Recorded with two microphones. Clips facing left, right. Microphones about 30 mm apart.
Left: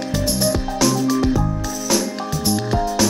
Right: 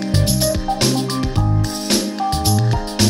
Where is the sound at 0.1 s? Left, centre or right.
Right.